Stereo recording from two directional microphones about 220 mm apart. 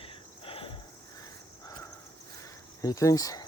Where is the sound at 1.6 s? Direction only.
15° left (ahead or behind).